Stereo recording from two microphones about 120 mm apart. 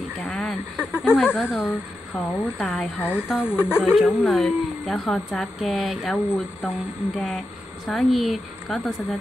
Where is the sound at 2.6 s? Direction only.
Centre (ahead or behind).